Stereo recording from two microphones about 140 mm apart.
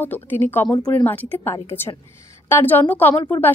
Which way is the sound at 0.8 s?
25° left (ahead or behind).